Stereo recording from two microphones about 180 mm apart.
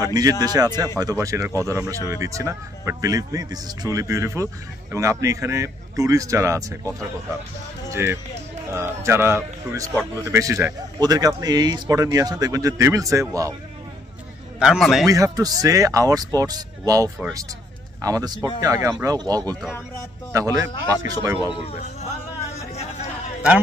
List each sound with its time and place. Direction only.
0.0 s a man's voice: 20° right (ahead or behind)
14.6 s a man's voice: centre (ahead or behind)
15.0 s a man's voice: 20° right (ahead or behind)
22.5 s a sound: 40° left (ahead or behind)